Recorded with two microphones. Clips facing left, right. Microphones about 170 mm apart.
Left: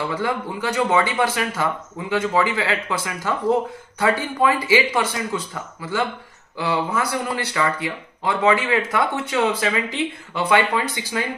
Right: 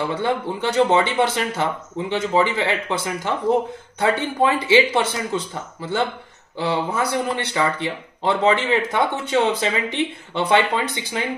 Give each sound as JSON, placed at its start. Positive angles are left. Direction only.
{"t": 0.1, "sound": "speech", "side_deg": -25}